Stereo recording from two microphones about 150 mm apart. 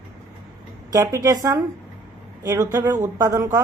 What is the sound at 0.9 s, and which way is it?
Speech, 20° right (ahead or behind).